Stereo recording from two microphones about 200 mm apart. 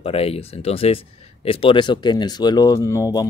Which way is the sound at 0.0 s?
30° left (ahead or behind).